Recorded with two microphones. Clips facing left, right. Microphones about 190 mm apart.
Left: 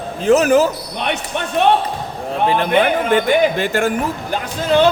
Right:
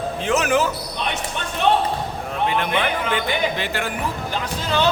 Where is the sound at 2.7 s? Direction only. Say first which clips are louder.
Left 8 dB; 45° left (ahead or behind).